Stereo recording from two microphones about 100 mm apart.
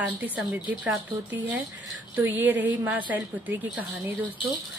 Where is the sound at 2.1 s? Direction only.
20° right (ahead or behind).